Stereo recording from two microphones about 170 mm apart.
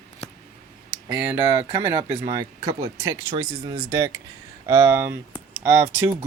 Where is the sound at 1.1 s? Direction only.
15° right (ahead or behind).